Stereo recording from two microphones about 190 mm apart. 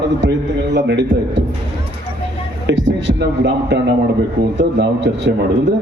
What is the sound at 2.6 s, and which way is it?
A man's voice, 70° right (ahead or behind).